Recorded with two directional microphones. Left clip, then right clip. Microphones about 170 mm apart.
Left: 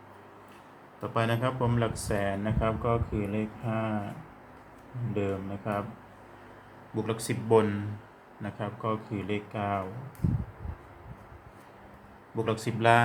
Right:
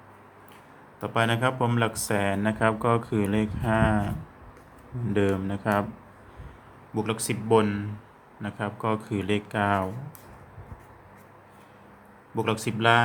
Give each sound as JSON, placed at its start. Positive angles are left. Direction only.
{"t": 1.0, "sound": "speech", "side_deg": -30}
{"t": 5.1, "sound": "speech", "side_deg": -60}
{"t": 6.9, "sound": "speech", "side_deg": -30}
{"t": 8.9, "sound": "speech", "side_deg": -55}
{"t": 12.4, "sound": "speech", "side_deg": -30}